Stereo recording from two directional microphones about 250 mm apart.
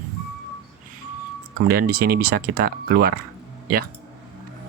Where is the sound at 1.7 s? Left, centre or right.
Right.